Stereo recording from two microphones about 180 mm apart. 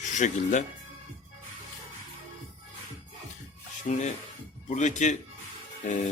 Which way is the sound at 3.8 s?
45° left (ahead or behind).